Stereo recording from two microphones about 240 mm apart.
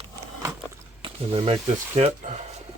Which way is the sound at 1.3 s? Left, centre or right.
Right.